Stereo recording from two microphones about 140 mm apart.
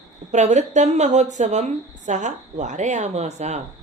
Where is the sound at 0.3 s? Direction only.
55° right (ahead or behind).